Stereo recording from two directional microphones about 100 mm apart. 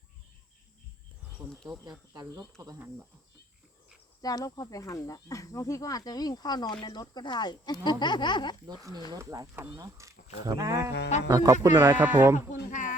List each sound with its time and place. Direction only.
2.1 s speech: 40° right (ahead or behind)
2.7 s speech: 20° right (ahead or behind)
4.2 s speech: 40° left (ahead or behind)
8.6 s speech: 40° right (ahead or behind)
11.7 s speech: 20° right (ahead or behind)